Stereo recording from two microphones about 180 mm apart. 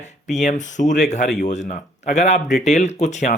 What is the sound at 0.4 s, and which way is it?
Speech, 45° left (ahead or behind).